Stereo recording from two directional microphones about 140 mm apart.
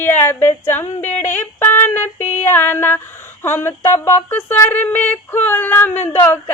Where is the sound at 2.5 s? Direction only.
15° left (ahead or behind).